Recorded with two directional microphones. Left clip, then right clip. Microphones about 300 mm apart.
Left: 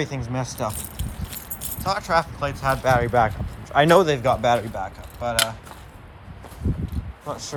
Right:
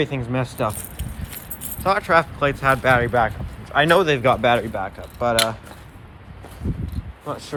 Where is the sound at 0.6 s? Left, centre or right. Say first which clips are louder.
Right 4 dB; centre.